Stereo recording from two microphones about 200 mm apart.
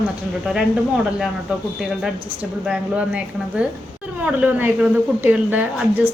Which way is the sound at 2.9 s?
5° right (ahead or behind).